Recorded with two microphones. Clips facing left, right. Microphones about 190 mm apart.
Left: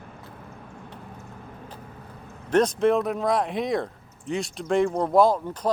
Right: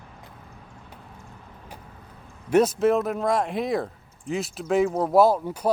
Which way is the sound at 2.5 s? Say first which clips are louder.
Right 1 dB; 5° right (ahead or behind).